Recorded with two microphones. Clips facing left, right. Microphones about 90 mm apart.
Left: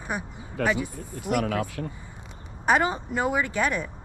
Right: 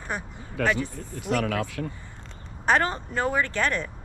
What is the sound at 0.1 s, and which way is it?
Speech, 10° left (ahead or behind).